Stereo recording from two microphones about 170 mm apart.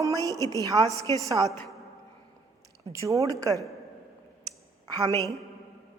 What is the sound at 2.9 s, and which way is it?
Speech, 20° right (ahead or behind).